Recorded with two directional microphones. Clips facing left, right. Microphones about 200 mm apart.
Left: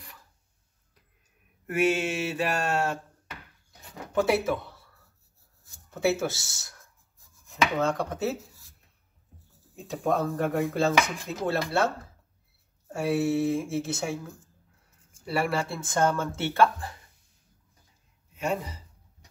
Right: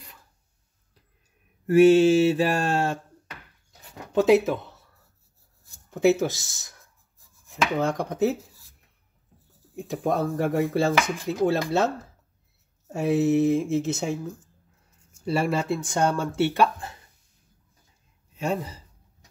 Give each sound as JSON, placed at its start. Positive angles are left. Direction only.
{"t": 1.7, "sound": "mantra", "side_deg": -30}
{"t": 4.1, "sound": "speech", "side_deg": -20}
{"t": 5.9, "sound": "speech", "side_deg": -15}
{"t": 9.8, "sound": "speech", "side_deg": -15}
{"t": 12.9, "sound": "speech", "side_deg": -20}
{"t": 15.2, "sound": "speech", "side_deg": -25}
{"t": 18.3, "sound": "a sound", "side_deg": -30}